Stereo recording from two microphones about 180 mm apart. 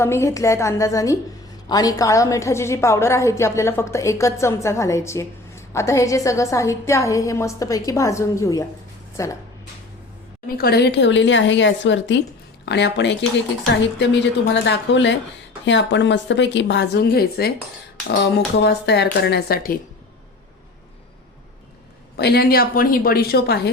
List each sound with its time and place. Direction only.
0.0 s a woman's voice: 15° left (ahead or behind)
10.6 s speech: 60° left (ahead or behind); by 12.1 s 90° left
12.6 s a woman's voice: 70° left (ahead or behind)
22.2 s a woman's voice: 60° left (ahead or behind)